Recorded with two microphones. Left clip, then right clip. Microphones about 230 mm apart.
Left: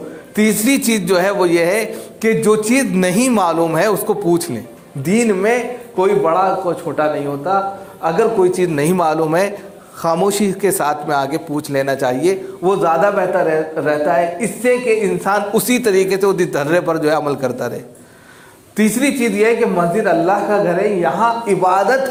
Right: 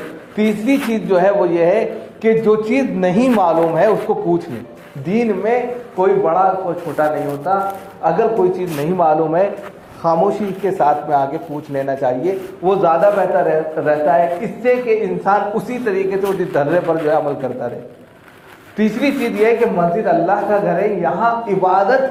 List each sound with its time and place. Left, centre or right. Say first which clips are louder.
0.3 s a man's voice: left 1 dB; left
15.6 s a man's voice: left 4 dB; left
18.8 s a man's voice: left 1 dB; left